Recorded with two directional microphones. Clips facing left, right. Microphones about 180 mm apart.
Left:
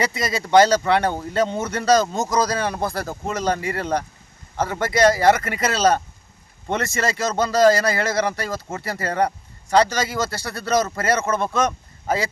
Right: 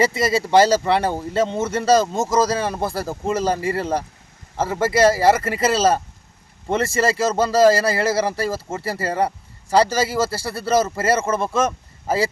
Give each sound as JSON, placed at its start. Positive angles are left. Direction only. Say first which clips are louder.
{"t": 0.0, "sound": "speech", "louder": "right 5 dB", "side_deg": -30}
{"t": 0.4, "sound": "speech", "louder": "left 1 dB", "side_deg": -5}
{"t": 7.2, "sound": "a man's voice", "louder": "right 1 dB", "side_deg": -5}